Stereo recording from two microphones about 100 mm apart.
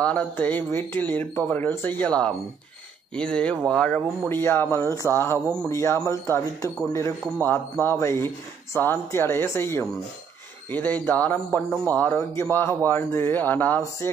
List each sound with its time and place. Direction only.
0.0 s speech: 15° left (ahead or behind)
4.3 s a man's voice: 20° left (ahead or behind)